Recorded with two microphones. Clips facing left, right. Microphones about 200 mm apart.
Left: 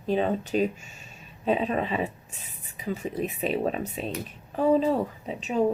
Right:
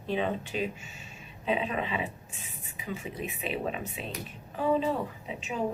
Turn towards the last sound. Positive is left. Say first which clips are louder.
# left 6 dB
turn(degrees=40)  # may be behind; listen again after turning